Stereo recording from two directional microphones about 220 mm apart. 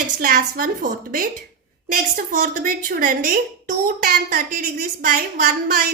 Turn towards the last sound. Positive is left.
turn(degrees=-40)  # may be behind; listen again after turning